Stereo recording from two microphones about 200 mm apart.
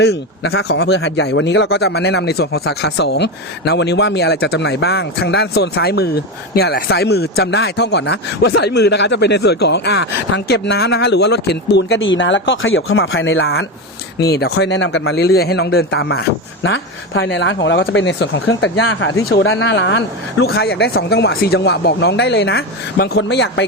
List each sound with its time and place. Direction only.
0.0 s speech: 55° left (ahead or behind); by 13.7 s 80° left
14.2 s speech: 55° left (ahead or behind)
16.6 s speech: 70° left (ahead or behind)
20.4 s speech: 55° left (ahead or behind)